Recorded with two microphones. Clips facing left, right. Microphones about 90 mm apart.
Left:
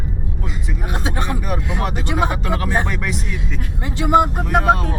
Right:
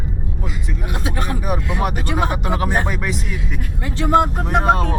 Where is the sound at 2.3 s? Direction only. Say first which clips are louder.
Right 1 dB; 20° right (ahead or behind).